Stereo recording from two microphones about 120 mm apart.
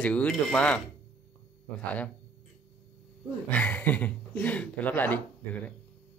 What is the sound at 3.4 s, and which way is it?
Speech, 10° left (ahead or behind).